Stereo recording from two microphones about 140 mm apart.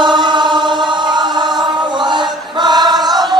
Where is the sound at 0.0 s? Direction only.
35° right (ahead or behind).